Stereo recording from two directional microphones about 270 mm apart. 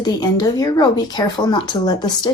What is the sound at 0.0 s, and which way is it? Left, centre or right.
Speech, centre.